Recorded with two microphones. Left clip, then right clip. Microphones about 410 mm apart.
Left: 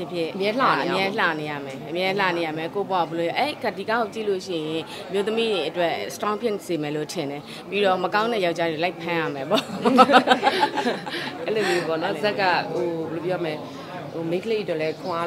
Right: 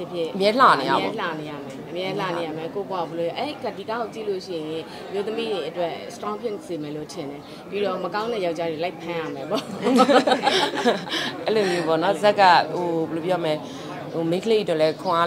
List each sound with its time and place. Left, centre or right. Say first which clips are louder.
0.4 s speech: right 5 dB; centre
0.9 s speech: left 2 dB; left
10.5 s speech: right 2 dB; centre